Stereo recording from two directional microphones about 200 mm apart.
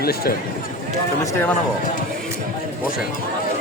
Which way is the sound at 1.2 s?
10° left (ahead or behind).